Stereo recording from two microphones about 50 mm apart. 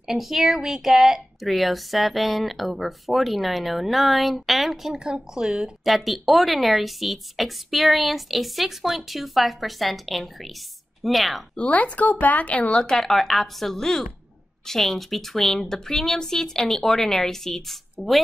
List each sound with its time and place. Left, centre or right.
0.0 s a woman's voice: centre
4.9 s speech: centre
5.9 s a woman's voice: centre
11.5 s speech: left
12.8 s a woman's voice: centre